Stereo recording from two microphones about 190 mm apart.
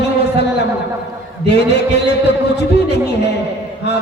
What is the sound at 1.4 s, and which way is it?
Music, 60° left (ahead or behind).